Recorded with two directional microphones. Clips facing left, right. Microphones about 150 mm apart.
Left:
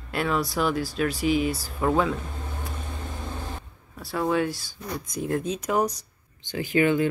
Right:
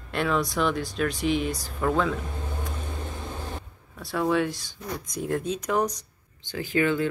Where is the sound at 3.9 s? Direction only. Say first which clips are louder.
Even; centre (ahead or behind).